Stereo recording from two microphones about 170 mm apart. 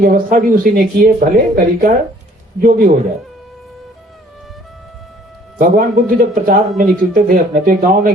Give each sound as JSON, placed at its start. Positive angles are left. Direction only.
{"t": 0.0, "sound": "speech", "side_deg": -60}
{"t": 5.5, "sound": "speech", "side_deg": -55}